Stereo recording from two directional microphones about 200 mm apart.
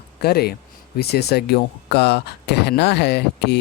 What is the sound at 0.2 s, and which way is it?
Speech, 50° left (ahead or behind).